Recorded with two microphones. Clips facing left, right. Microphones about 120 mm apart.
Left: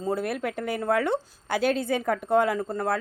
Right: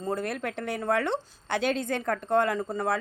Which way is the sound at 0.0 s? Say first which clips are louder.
Left 3 dB; 5° left (ahead or behind).